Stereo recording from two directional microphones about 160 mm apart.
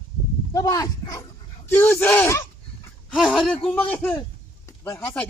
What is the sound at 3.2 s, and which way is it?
A man's voice, centre (ahead or behind).